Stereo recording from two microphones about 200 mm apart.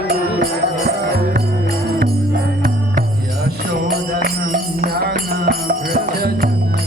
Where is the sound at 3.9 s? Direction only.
50° right (ahead or behind).